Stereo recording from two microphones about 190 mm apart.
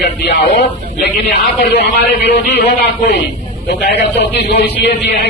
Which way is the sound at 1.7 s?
60° left (ahead or behind).